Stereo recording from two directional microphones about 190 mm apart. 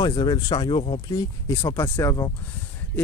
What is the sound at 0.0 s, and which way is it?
Speech, 20° left (ahead or behind).